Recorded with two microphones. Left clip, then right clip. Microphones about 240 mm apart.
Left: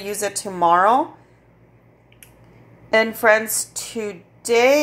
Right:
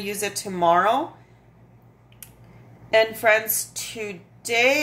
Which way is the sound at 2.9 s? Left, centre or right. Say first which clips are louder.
Left 2 dB; centre.